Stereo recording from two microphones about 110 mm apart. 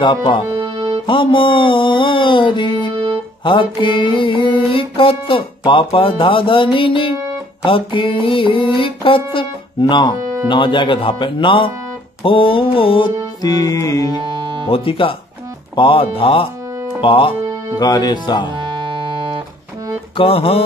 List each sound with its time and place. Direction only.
0.0 s music: 50° left (ahead or behind)
0.6 s music: 30° right (ahead or behind)
1.0 s music: 50° left (ahead or behind)
10.2 s music: 25° right (ahead or behind)
10.5 s music: 50° left (ahead or behind)
13.4 s speech: 35° left (ahead or behind)
14.2 s music: 45° right (ahead or behind)
14.7 s speech: 55° left (ahead or behind)
17.0 s music: 55° left (ahead or behind)
17.7 s speech: 35° left (ahead or behind)
18.6 s music: 45° right (ahead or behind)
20.2 s speech: 60° left (ahead or behind)